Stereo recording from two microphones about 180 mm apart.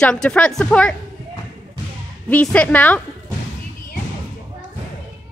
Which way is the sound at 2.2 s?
5° left (ahead or behind).